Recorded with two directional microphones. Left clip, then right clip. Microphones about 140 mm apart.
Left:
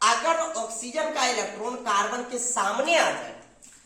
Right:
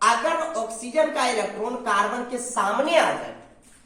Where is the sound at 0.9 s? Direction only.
30° left (ahead or behind).